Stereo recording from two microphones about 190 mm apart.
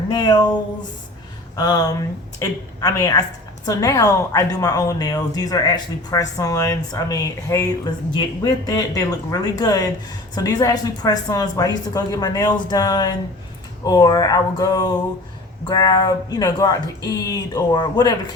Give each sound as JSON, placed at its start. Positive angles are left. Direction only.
{"t": 0.1, "sound": "speech", "side_deg": 20}
{"t": 1.5, "sound": "a woman's voice", "side_deg": 20}